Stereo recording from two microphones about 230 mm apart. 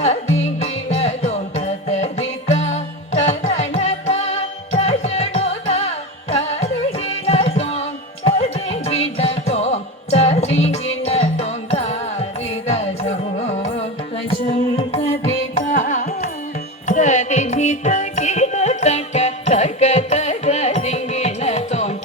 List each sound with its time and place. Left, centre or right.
0.6 s music: left
14.8 s carnatic music: left
16.8 s music: left